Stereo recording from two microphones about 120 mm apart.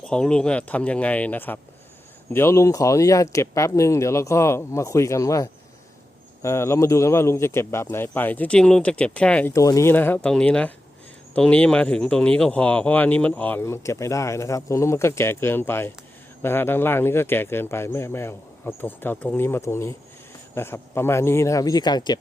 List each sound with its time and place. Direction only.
0.0 s speech: 5° left (ahead or behind)
9.5 s speech: 25° left (ahead or behind)
9.9 s speech: 15° left (ahead or behind); by 22.2 s 35° left (ahead or behind)